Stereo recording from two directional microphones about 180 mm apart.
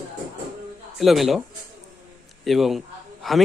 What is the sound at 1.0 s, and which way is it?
Speech, centre (ahead or behind).